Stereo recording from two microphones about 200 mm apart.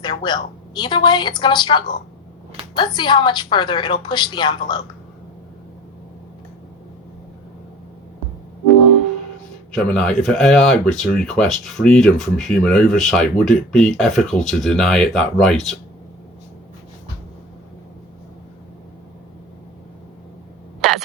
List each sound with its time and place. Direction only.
0.0 s a woman's voice: 20° left (ahead or behind)
9.7 s speech: 5° left (ahead or behind)
20.8 s a sound: centre (ahead or behind)